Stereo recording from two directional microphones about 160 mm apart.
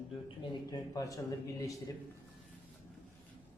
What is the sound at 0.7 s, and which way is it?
Speech, 20° left (ahead or behind).